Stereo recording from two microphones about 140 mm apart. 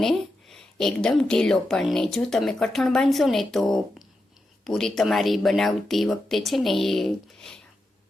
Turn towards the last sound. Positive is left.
turn(degrees=0)  # may be behind; listen again after turning